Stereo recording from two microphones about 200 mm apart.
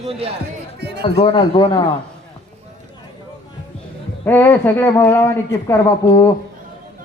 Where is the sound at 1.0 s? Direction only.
25° left (ahead or behind).